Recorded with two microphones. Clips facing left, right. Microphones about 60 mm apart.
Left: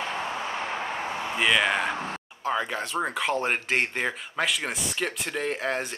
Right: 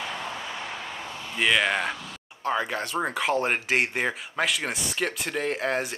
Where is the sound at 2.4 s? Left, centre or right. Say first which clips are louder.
Right 1 dB; centre.